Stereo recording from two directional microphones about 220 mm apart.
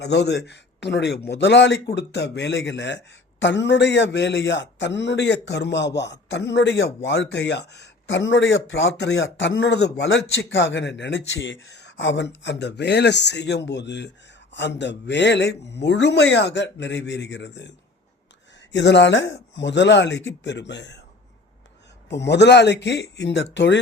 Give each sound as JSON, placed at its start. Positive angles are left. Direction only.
{"t": 0.0, "sound": "a man's voice", "side_deg": 50}
{"t": 22.1, "sound": "a man's voice", "side_deg": 50}